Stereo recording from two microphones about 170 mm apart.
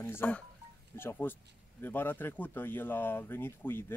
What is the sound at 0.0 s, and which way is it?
Speech, 10° left (ahead or behind).